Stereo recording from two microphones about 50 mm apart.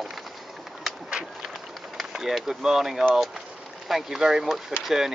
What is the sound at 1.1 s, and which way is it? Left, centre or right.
Run, centre.